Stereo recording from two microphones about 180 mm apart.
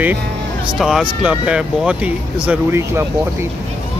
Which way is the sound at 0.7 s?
Centre (ahead or behind).